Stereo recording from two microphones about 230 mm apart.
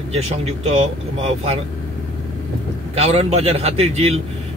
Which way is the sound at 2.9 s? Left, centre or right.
Right.